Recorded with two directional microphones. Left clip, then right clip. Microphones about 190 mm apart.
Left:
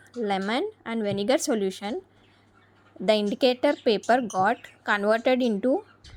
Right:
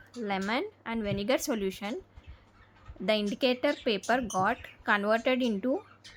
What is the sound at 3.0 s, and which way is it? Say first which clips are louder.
A woman's voice: left 6 dB; 25° left (ahead or behind).